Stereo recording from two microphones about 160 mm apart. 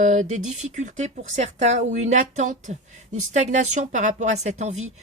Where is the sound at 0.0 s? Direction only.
50° right (ahead or behind).